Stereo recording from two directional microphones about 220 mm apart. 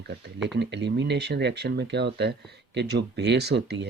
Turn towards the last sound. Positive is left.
turn(degrees=-50)  # may be behind; listen again after turning